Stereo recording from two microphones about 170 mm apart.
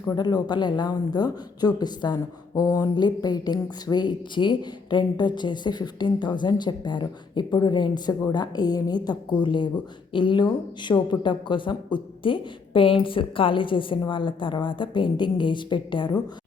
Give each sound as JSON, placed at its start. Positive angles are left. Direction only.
{"t": 0.1, "sound": "a woman's voice", "side_deg": 25}